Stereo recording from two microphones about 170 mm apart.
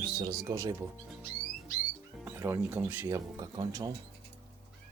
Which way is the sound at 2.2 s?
15° right (ahead or behind).